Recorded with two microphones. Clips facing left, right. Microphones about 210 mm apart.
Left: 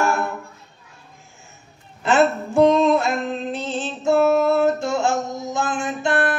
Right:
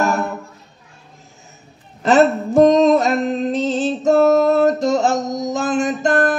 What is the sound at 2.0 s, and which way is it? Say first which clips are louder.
Music: right 4 dB; 40° right (ahead or behind).